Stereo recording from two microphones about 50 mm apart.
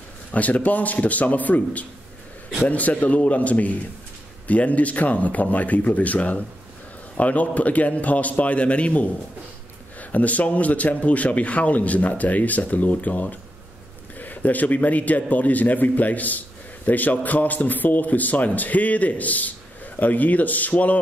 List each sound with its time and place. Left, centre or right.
0.3 s a man's voice: left